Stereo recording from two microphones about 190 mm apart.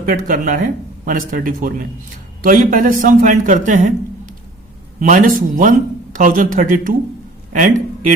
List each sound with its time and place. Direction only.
0.1 s a man's voice: 45° right (ahead or behind)